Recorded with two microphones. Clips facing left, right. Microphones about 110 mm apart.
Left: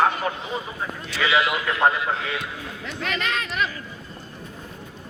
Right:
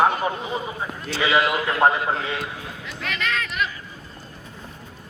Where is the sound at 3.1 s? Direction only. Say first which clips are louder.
Even; 30° left (ahead or behind).